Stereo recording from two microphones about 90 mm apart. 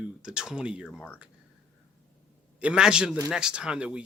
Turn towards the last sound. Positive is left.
turn(degrees=-10)  # may be behind; listen again after turning